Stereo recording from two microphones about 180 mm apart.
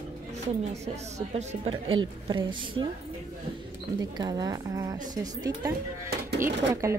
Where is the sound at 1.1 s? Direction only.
40° right (ahead or behind).